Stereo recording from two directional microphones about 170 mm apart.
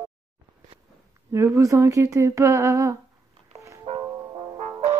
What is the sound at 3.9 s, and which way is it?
Music, 40° right (ahead or behind).